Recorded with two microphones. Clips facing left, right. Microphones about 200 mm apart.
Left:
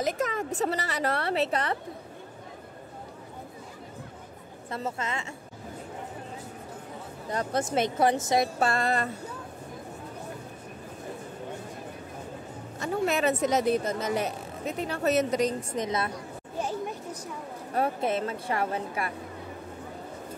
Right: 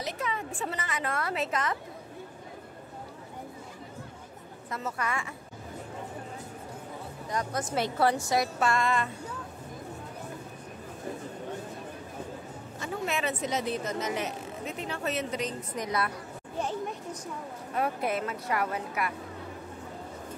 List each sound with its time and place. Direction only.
0.0 s speech: 45° left (ahead or behind)
4.6 s speech: 30° left (ahead or behind)
7.2 s speech: 30° left (ahead or behind)
8.5 s speech: 35° left (ahead or behind)
12.8 s speech: 40° left (ahead or behind)
15.7 s speech: 25° left (ahead or behind)
17.7 s speech: 25° left (ahead or behind)